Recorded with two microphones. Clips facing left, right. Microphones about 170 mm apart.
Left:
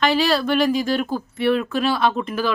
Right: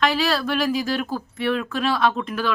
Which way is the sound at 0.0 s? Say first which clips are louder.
Left 3 dB; centre (ahead or behind).